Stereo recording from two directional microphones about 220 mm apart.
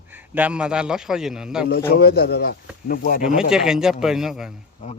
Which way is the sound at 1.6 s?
45° left (ahead or behind).